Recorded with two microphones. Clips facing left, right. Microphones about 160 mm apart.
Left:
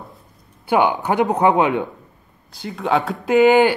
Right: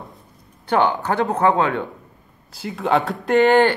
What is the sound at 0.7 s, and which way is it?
A man's voice, 10° left (ahead or behind).